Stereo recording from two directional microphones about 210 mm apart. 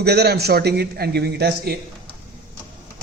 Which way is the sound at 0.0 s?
50° right (ahead or behind).